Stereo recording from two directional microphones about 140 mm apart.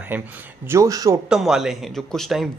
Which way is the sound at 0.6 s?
20° right (ahead or behind).